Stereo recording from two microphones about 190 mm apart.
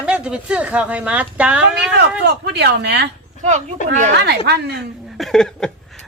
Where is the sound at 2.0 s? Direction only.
60° right (ahead or behind).